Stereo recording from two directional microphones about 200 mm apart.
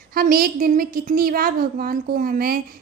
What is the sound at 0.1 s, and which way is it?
A woman's voice, 45° right (ahead or behind).